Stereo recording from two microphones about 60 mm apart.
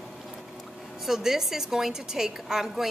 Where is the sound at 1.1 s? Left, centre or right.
Centre.